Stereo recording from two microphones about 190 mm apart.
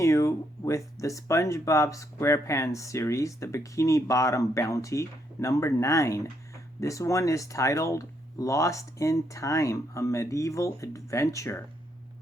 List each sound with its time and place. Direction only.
0.0 s speech: 15° left (ahead or behind)